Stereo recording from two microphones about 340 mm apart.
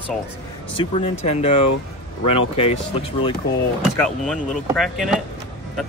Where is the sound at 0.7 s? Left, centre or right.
Centre.